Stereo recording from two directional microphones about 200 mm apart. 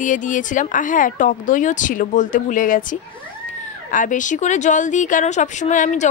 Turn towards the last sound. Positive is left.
turn(degrees=35)  # may be behind; listen again after turning